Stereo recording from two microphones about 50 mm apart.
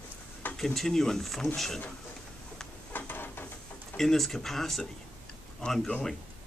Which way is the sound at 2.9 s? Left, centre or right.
Left.